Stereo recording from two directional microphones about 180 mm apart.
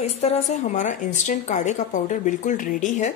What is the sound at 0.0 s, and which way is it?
A woman's voice, 35° left (ahead or behind).